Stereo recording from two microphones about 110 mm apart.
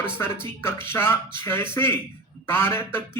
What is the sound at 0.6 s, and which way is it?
A man's voice, 20° left (ahead or behind).